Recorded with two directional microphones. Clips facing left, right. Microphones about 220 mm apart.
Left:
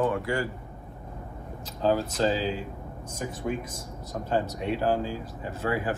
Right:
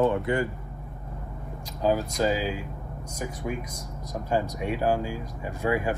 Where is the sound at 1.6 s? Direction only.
10° right (ahead or behind).